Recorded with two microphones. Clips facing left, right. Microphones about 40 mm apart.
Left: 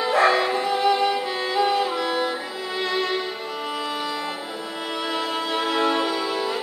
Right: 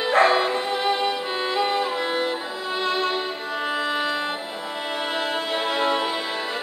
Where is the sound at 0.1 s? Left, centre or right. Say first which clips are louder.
Right 1 dB; right.